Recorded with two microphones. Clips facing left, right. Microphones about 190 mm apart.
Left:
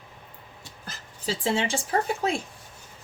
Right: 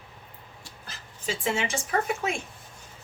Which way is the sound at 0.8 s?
35° left (ahead or behind).